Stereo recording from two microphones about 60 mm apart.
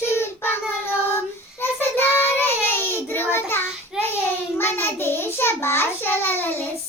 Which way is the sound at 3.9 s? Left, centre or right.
Centre.